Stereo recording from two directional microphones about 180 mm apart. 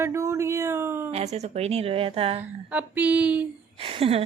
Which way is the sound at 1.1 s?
35° right (ahead or behind).